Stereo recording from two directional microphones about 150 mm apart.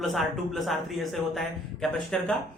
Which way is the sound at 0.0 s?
Centre (ahead or behind).